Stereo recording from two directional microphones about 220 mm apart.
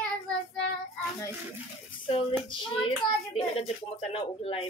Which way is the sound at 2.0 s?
20° left (ahead or behind).